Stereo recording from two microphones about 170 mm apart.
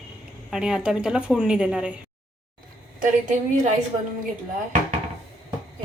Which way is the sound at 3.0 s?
50° right (ahead or behind).